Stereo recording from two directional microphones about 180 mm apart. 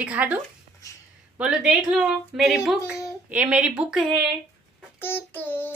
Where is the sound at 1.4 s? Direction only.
5° right (ahead or behind).